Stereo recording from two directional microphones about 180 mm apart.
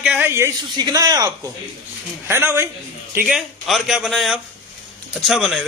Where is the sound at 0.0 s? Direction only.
5° right (ahead or behind).